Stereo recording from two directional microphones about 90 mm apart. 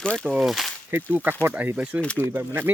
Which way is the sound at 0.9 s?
25° right (ahead or behind).